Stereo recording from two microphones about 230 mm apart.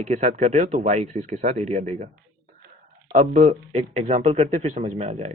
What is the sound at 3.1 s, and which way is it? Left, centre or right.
Speech, right.